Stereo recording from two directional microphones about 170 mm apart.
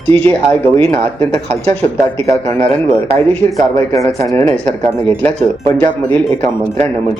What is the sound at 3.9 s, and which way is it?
Speech, 15° left (ahead or behind).